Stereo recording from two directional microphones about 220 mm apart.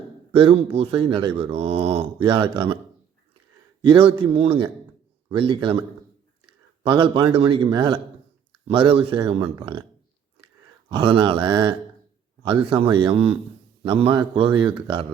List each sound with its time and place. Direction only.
0.3 s speech: 25° right (ahead or behind)
3.8 s speech: 25° right (ahead or behind)
6.8 s speech: 20° right (ahead or behind)
10.8 s speech: 20° right (ahead or behind)